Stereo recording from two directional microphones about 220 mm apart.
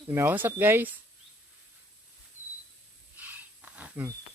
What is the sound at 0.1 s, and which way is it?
Speech, 10° right (ahead or behind).